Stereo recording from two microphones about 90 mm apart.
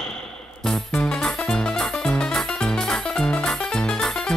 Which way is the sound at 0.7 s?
5° left (ahead or behind).